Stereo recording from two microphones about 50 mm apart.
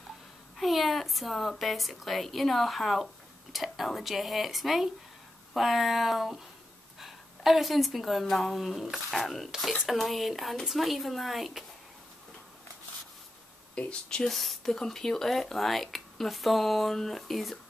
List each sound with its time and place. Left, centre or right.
0.6 s speech: centre
13.7 s speech: left
14.2 s speech: centre